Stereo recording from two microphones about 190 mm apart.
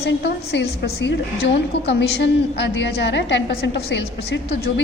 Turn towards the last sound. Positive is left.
turn(degrees=65)  # may be behind; listen again after turning